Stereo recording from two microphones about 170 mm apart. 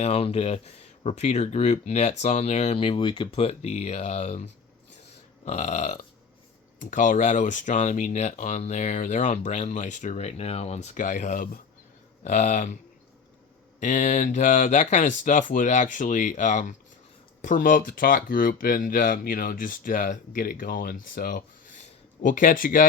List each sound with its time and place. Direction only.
0.0 s speech: 35° left (ahead or behind)
13.7 s speech: 45° left (ahead or behind)